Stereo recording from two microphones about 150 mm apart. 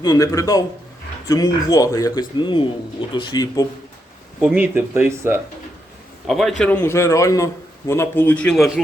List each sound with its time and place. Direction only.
0.0 s speech: 25° left (ahead or behind)
4.4 s speech: 10° right (ahead or behind)
6.2 s a man's voice: centre (ahead or behind)
6.7 s a man's voice: 20° left (ahead or behind); by 8.8 s centre (ahead or behind)